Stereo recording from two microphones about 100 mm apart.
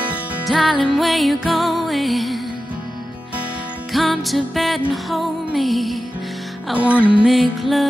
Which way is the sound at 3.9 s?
Centre (ahead or behind).